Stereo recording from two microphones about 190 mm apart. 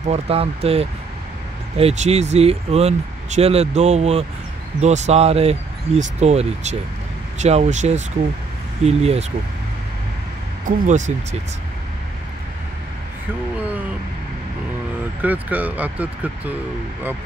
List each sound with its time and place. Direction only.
0.1 s speech: 30° right (ahead or behind)
10.6 s speech: 40° right (ahead or behind)
15.2 s speech: 10° right (ahead or behind)